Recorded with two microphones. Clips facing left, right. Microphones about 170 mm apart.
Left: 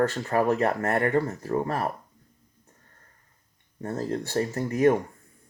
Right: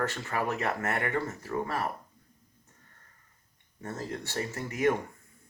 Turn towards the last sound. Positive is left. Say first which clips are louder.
# left 6 dB
turn(degrees=35)  # may be behind; listen again after turning